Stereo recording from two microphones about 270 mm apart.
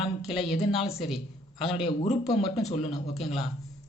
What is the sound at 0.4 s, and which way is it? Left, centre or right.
Speech, centre.